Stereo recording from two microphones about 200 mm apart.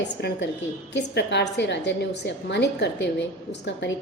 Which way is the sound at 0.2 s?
60° left (ahead or behind).